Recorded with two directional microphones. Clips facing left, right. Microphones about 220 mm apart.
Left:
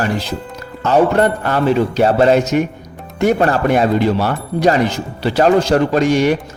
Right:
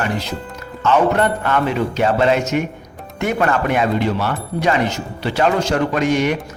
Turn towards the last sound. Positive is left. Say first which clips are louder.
# left 4 dB
turn(degrees=35)  # may be behind; listen again after turning